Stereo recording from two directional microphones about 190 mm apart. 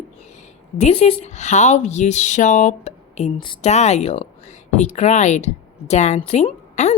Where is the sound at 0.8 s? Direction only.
35° left (ahead or behind).